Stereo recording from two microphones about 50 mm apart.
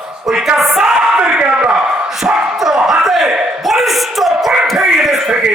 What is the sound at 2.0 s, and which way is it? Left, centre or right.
Crowd, centre.